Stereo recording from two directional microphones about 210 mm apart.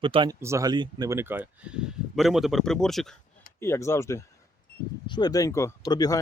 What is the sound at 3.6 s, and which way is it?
Speech, 10° left (ahead or behind).